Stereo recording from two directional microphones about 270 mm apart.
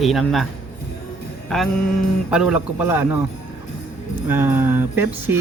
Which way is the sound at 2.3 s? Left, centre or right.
Centre.